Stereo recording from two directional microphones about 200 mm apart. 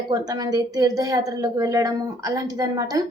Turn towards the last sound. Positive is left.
turn(degrees=-20)  # may be behind; listen again after turning